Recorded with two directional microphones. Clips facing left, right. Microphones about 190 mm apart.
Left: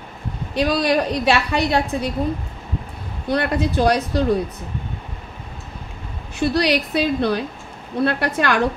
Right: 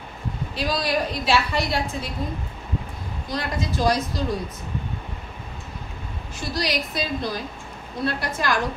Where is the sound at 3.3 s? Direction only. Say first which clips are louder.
Left 8 dB; 65° left (ahead or behind).